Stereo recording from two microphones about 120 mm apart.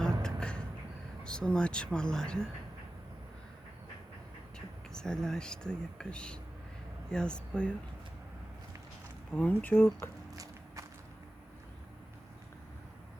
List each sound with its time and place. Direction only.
0.0 s a sound: 5° left (ahead or behind)
1.2 s speech: 5° left (ahead or behind)
4.5 s speech: 5° left (ahead or behind)
9.3 s speech: 10° left (ahead or behind)
10.3 s walk: 30° right (ahead or behind)